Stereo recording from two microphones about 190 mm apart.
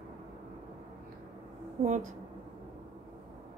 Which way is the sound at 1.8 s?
40° right (ahead or behind).